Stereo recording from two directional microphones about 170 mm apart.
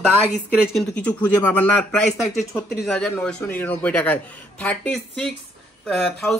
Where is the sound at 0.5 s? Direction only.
5° right (ahead or behind).